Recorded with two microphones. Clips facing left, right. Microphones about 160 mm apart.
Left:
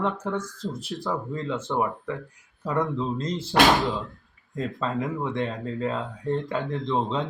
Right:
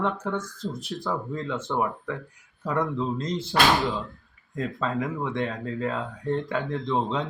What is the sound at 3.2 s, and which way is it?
Speech, 30° left (ahead or behind).